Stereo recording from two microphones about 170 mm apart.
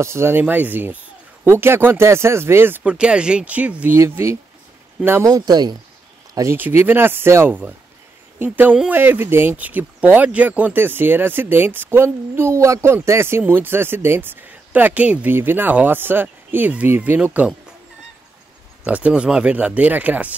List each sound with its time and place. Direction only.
0.0 s speech: 15° right (ahead or behind)
18.9 s speech: 10° right (ahead or behind)